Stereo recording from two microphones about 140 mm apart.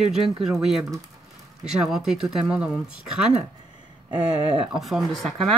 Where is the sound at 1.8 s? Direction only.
5° right (ahead or behind).